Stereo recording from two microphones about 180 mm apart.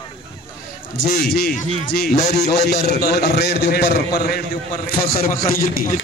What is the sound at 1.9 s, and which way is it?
Speech, 45° left (ahead or behind).